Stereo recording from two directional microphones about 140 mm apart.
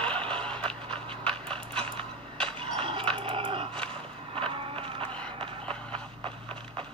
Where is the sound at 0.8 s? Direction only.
40° right (ahead or behind).